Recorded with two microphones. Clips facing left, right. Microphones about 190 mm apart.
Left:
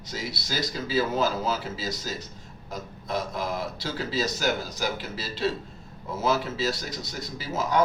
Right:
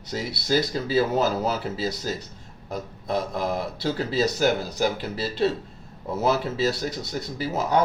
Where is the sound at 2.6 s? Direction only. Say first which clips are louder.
Right 5 dB; 60° right (ahead or behind).